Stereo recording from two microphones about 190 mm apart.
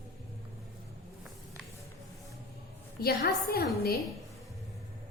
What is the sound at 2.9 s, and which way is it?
Speech, 55° left (ahead or behind).